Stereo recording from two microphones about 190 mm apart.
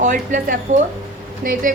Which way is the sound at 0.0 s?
40° right (ahead or behind).